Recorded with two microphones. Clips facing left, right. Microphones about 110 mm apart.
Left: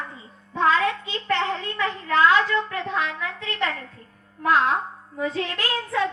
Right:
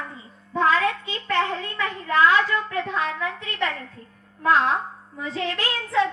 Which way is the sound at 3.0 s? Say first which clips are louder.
Right 1 dB; 30° right (ahead or behind).